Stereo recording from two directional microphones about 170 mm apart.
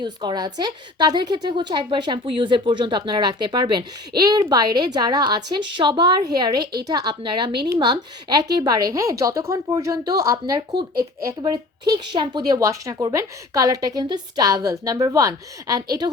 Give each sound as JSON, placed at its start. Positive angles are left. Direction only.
{"t": 0.0, "sound": "a woman's voice", "side_deg": -25}